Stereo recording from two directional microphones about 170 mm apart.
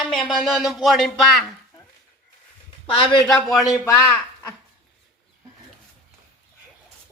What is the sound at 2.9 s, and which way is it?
Speech, 30° left (ahead or behind).